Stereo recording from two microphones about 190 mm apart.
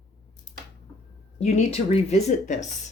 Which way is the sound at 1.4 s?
35° left (ahead or behind).